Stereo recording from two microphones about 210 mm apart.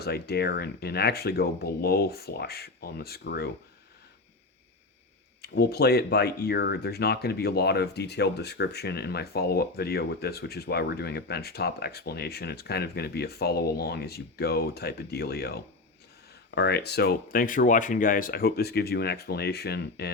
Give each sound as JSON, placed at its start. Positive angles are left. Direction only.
{"t": 0.0, "sound": "speech", "side_deg": 50}
{"t": 5.4, "sound": "speech", "side_deg": 50}